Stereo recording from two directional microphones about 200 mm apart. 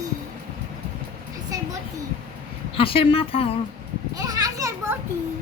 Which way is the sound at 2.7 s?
25° left (ahead or behind).